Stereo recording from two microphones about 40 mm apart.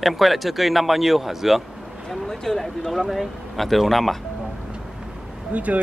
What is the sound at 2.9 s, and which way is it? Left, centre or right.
Speech, centre.